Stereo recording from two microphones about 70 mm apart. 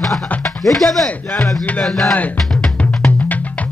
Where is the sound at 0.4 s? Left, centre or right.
Centre.